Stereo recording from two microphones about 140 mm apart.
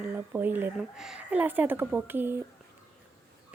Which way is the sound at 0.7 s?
5° right (ahead or behind).